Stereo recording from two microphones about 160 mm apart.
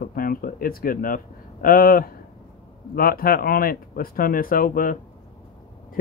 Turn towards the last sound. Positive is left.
turn(degrees=60)  # may be behind; listen again after turning